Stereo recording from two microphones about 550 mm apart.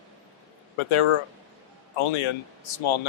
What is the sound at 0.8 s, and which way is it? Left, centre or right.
Speech, left.